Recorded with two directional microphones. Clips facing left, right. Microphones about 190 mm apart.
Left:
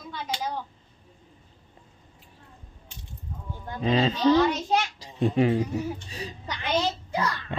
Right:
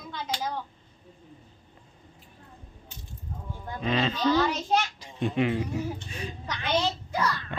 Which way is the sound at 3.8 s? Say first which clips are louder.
Left 4 dB; 30° left (ahead or behind).